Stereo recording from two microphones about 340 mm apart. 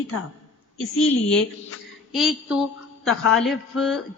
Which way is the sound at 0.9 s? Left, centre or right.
Left.